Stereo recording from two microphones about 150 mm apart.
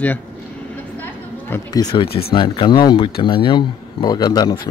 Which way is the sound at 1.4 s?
20° left (ahead or behind).